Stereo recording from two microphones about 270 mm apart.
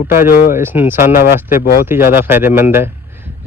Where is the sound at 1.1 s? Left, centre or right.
Left.